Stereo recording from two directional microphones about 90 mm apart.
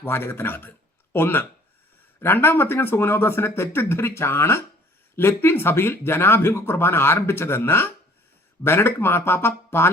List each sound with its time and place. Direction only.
0.0 s speech: 25° left (ahead or behind)